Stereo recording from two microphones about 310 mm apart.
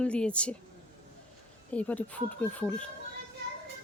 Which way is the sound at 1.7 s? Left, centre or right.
Centre.